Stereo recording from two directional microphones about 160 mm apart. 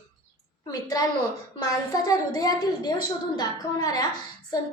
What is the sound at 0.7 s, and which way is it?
A woman's voice, 25° left (ahead or behind).